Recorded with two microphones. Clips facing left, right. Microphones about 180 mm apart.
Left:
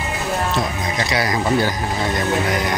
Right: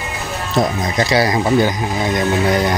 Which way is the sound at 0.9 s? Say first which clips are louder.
Right 6 dB; 30° right (ahead or behind).